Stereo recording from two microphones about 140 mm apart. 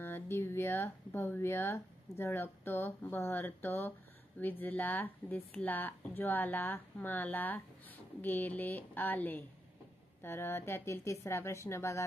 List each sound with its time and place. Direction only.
0.0 s speech: 15° left (ahead or behind)